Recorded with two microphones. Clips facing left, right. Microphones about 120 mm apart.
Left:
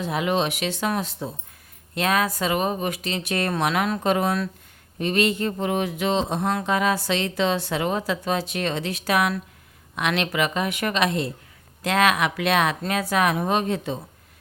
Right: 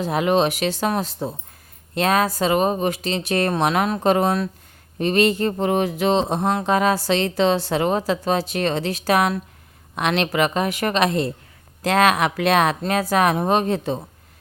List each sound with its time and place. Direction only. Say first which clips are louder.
0.0 s a woman's voice: right 5 dB; 40° right (ahead or behind)